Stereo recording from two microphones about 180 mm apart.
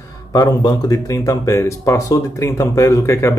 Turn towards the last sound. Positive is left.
turn(degrees=15)  # may be behind; listen again after turning